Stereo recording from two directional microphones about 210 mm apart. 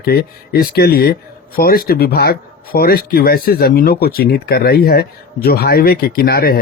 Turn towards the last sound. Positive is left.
turn(degrees=45)  # may be behind; listen again after turning